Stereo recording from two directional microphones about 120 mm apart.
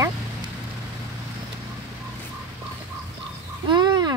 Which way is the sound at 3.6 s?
35° right (ahead or behind).